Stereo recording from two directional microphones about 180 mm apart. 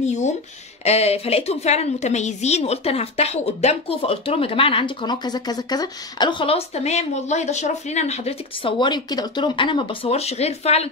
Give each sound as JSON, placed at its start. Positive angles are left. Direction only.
{"t": 0.0, "sound": "a woman's voice", "side_deg": 40}